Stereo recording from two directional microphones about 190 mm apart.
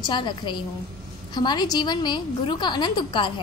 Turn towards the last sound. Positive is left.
turn(degrees=25)  # may be behind; listen again after turning